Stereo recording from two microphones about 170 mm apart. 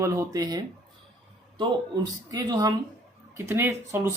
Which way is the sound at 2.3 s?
20° right (ahead or behind).